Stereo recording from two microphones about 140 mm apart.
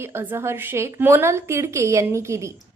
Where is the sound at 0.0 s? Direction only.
15° right (ahead or behind).